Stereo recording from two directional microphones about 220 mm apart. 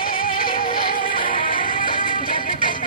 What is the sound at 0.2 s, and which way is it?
Music, 40° left (ahead or behind).